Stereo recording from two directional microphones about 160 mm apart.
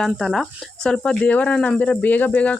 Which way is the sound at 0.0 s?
Centre (ahead or behind).